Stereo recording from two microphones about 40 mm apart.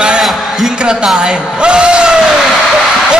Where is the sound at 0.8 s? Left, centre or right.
Centre.